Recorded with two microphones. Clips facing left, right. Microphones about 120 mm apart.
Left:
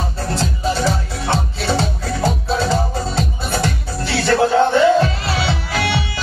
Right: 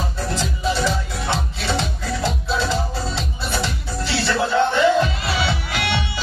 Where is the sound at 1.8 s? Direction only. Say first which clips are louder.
Left 4 dB; 45° left (ahead or behind).